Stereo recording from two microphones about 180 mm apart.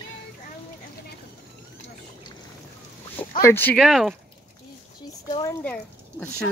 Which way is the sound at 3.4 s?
10° left (ahead or behind).